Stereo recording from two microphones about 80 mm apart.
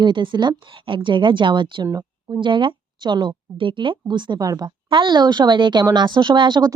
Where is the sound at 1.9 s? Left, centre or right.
Right.